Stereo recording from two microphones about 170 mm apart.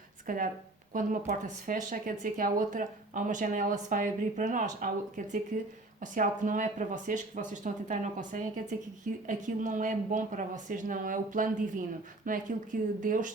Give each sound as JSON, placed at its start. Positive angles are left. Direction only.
{"t": 0.3, "sound": "speech", "side_deg": -55}